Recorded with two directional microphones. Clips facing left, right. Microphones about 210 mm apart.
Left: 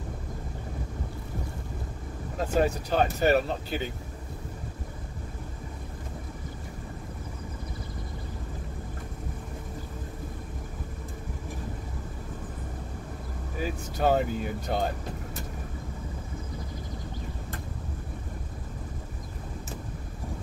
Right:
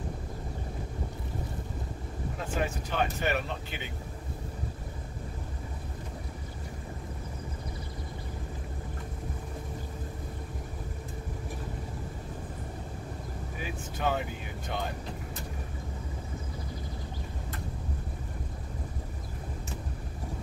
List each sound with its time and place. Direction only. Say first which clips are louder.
2.3 s speech: left 8 dB; 40° left (ahead or behind)
13.6 s speech: left 7 dB; 40° left (ahead or behind)